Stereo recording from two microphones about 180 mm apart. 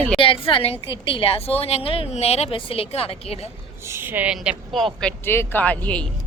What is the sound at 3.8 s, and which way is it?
A woman's voice, 15° right (ahead or behind).